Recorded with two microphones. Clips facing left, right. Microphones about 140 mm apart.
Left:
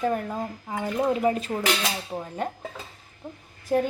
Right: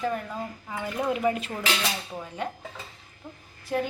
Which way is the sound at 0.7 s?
30° left (ahead or behind).